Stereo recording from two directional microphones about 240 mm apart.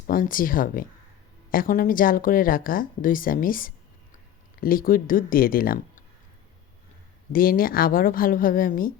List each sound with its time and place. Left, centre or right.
0.1 s speech: left
7.3 s speech: left